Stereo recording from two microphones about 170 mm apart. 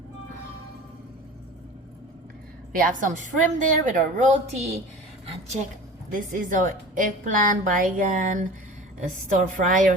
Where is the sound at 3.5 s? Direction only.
50° right (ahead or behind).